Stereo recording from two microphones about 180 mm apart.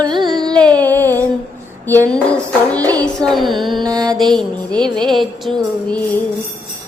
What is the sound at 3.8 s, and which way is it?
Carnatic music, 20° right (ahead or behind).